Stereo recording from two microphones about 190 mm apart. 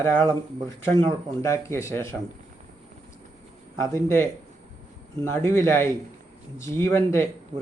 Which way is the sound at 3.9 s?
15° left (ahead or behind).